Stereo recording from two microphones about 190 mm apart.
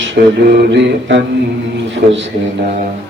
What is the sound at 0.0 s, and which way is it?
Speech, 70° right (ahead or behind).